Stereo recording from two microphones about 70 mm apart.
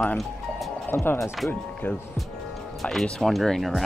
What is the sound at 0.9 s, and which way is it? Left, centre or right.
Speech, left.